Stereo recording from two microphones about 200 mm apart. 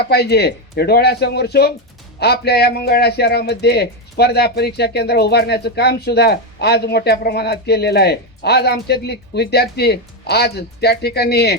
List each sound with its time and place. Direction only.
0.0 s speech: 55° left (ahead or behind)